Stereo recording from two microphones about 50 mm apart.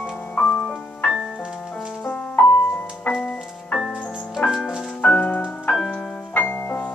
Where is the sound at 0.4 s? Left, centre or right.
Centre.